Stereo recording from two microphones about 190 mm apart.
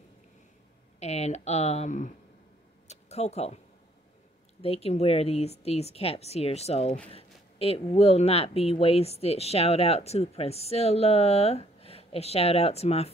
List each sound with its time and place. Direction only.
0.9 s speech: 35° left (ahead or behind)
2.9 s a sound: 35° left (ahead or behind)
4.6 s speech: 30° left (ahead or behind)